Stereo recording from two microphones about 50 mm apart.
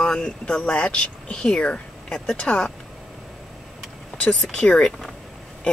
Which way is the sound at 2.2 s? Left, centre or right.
Centre.